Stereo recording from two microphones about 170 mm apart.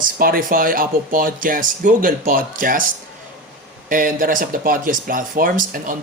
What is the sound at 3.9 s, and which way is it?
Speech, 55° right (ahead or behind).